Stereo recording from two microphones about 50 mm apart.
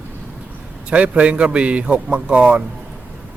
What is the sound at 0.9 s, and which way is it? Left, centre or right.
Speech, right.